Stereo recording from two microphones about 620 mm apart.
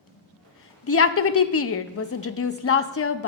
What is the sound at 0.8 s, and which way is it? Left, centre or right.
A woman's voice, left.